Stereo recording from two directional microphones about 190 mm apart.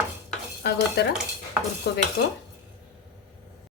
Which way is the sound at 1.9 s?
60° left (ahead or behind).